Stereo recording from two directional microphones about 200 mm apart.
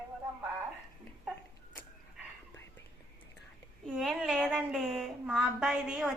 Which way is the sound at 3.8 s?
Centre (ahead or behind).